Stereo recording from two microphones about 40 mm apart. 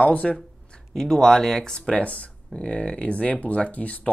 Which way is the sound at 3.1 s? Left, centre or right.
Left.